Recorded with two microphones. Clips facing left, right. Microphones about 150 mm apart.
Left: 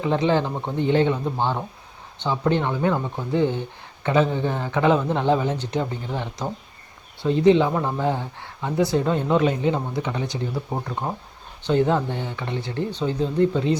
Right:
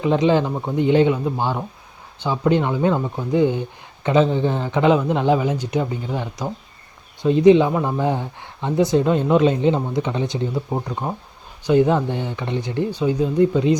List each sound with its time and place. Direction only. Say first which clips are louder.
0.0 s speech: right 4 dB; 15° right (ahead or behind)
10.7 s speech: right 3 dB; 10° right (ahead or behind)